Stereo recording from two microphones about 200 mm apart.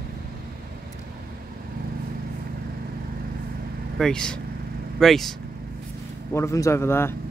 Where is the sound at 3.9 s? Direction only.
5° left (ahead or behind).